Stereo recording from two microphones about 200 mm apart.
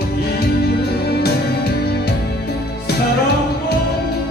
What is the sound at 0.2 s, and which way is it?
Music, 55° left (ahead or behind).